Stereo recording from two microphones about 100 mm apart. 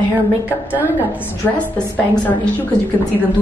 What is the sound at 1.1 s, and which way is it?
Speech, 20° left (ahead or behind).